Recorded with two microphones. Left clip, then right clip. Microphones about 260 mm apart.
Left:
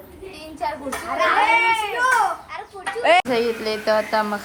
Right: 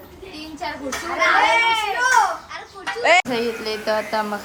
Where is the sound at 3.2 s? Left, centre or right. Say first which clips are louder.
Left 2 dB; centre.